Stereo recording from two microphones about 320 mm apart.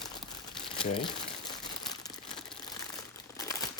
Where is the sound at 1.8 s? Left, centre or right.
Centre.